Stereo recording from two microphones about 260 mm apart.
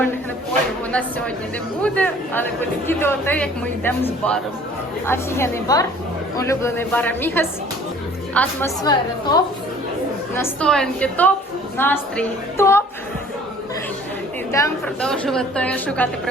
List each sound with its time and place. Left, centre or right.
1.8 s a man's voice: centre
14.5 s a woman's voice: centre